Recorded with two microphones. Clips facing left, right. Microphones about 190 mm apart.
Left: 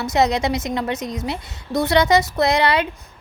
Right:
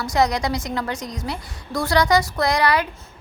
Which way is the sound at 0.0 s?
25° left (ahead or behind).